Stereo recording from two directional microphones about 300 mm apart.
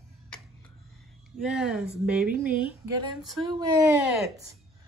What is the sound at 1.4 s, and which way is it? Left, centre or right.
Speech, centre.